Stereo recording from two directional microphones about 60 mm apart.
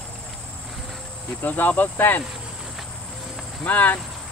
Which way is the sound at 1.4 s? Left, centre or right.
Left.